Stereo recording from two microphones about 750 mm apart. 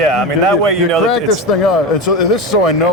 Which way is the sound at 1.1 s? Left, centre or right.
Left.